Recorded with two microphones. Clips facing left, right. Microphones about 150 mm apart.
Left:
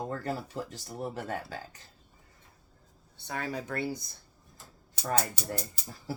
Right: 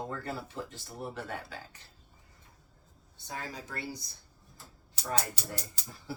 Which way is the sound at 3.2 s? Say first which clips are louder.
Left 6 dB; 65° left (ahead or behind).